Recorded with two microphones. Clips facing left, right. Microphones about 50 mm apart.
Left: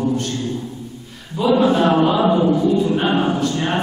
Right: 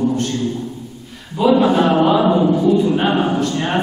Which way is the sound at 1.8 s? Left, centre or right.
Centre.